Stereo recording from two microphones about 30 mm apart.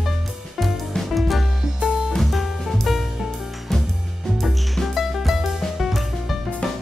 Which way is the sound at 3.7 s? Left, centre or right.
Centre.